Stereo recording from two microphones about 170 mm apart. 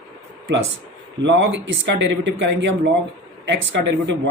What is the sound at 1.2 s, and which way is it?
Speech, 90° right.